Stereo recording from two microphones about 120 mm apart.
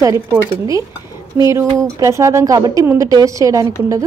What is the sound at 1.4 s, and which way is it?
A woman's voice, 25° right (ahead or behind).